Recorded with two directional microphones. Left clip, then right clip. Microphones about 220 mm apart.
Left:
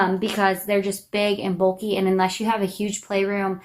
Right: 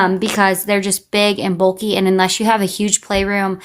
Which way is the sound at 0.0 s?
50° right (ahead or behind).